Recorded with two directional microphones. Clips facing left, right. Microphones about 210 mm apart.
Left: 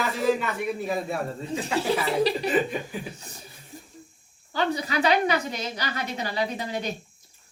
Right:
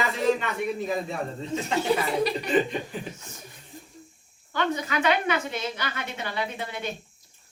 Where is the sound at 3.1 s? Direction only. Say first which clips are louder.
Even; 35° left (ahead or behind).